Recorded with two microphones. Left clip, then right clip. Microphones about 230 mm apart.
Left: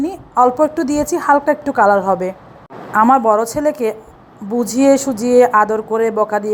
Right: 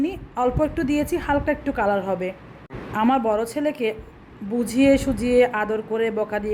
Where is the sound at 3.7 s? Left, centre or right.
Left.